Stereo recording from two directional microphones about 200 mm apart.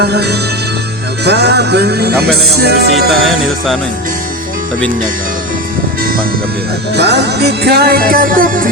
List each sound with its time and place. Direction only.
0.0 s music: 55° right (ahead or behind)
3.1 s music: centre (ahead or behind)
6.9 s music: 55° right (ahead or behind)